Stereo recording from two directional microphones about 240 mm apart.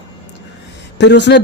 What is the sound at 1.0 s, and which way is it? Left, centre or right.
Speech, left.